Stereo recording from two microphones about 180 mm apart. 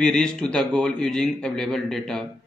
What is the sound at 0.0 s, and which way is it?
Speech, 5° left (ahead or behind).